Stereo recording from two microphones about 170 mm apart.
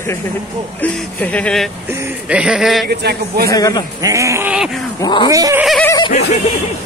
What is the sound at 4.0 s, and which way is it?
Speech, 20° right (ahead or behind).